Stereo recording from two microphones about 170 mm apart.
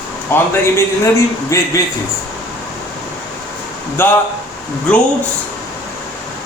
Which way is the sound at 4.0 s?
15° left (ahead or behind).